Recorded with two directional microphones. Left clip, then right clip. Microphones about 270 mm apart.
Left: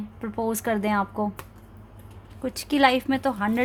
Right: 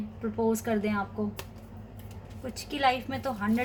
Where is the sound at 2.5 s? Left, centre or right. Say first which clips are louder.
Left 6 dB; left.